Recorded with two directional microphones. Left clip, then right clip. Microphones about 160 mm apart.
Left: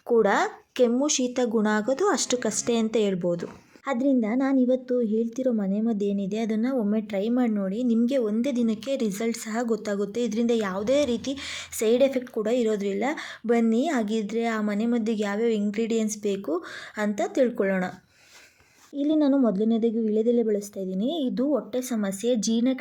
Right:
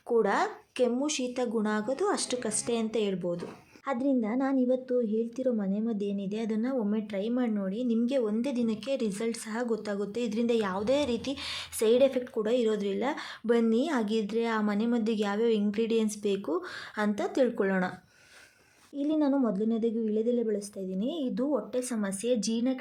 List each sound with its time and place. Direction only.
0.1 s speech: 25° left (ahead or behind)
3.8 s a woman's voice: 20° left (ahead or behind)
18.9 s speech: 25° left (ahead or behind)